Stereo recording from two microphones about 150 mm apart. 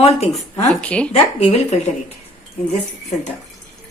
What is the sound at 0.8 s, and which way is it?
Speech, 10° left (ahead or behind).